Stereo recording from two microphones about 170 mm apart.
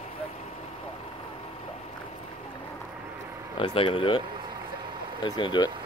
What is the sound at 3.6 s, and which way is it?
Speech, 30° left (ahead or behind).